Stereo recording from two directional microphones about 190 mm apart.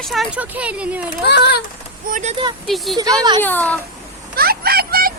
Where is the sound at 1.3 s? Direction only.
65° left (ahead or behind).